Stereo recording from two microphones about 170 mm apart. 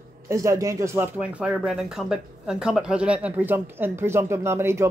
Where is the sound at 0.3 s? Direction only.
20° right (ahead or behind).